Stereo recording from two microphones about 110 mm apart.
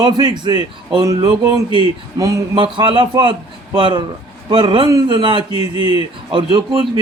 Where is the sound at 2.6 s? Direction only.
45° right (ahead or behind).